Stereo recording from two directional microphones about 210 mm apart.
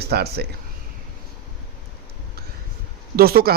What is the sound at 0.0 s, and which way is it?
Speech, 50° right (ahead or behind).